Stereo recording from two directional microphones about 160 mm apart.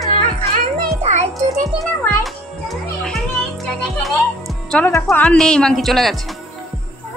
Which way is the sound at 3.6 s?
Centre (ahead or behind).